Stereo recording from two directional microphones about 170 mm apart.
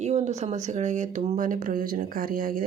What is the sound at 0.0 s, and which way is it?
Speech, 40° right (ahead or behind).